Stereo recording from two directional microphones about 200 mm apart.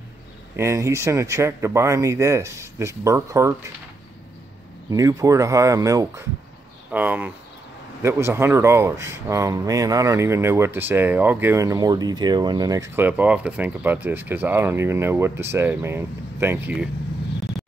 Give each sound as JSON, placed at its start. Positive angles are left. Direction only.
{"t": 0.6, "sound": "speech", "side_deg": -15}
{"t": 4.9, "sound": "speech", "side_deg": -15}